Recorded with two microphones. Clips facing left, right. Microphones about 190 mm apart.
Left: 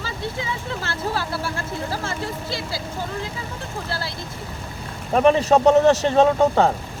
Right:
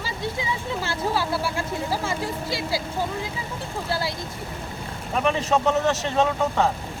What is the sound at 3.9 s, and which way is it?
Speech, 15° right (ahead or behind).